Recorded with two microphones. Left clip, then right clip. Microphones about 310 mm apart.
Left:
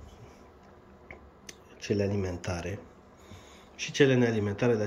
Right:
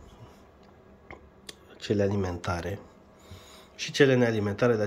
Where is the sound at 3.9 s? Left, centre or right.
Centre.